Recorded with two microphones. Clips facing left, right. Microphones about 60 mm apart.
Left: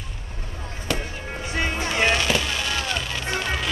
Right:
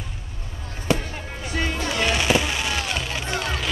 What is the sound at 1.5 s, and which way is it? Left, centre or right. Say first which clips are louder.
Music: even; left.